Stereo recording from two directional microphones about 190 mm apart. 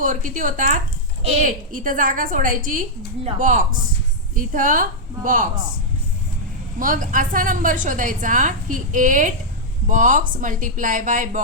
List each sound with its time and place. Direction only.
0.0 s a woman's voice: 45° right (ahead or behind)
6.7 s a woman's voice: 45° right (ahead or behind)